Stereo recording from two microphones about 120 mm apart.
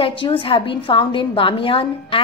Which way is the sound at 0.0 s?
50° left (ahead or behind).